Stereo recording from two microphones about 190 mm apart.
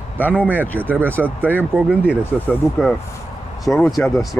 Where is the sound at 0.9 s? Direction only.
10° right (ahead or behind).